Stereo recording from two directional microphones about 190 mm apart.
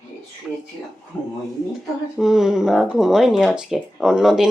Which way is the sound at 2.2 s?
Centre (ahead or behind).